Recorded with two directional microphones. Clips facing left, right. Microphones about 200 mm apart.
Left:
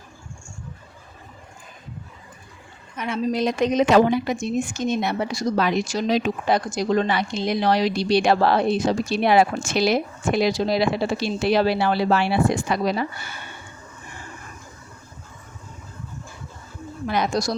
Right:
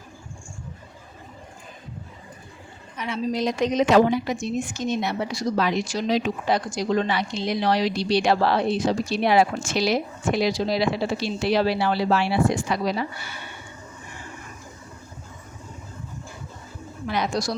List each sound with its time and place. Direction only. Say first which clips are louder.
3.0 s a woman's voice: left 2 dB; 55° left (ahead or behind)
17.1 s a woman's voice: left 2 dB; 45° left (ahead or behind)